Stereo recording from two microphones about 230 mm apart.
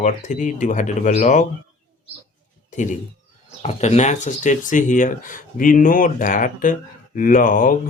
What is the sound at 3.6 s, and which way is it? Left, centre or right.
Speech, left.